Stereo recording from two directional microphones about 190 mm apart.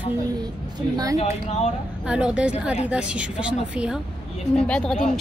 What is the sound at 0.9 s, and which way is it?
Speech, 20° right (ahead or behind).